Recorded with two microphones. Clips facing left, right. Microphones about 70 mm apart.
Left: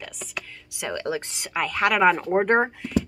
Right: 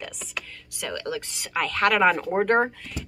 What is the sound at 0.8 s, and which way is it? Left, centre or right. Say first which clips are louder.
Speech: left 3 dB; left.